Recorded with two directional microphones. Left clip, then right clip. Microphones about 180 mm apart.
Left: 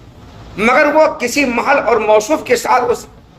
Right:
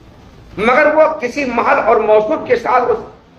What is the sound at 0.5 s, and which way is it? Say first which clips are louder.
A man's voice: even; 55° left (ahead or behind).